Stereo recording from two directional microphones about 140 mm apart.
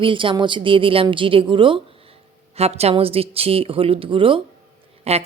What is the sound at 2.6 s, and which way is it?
A woman's voice, 50° right (ahead or behind).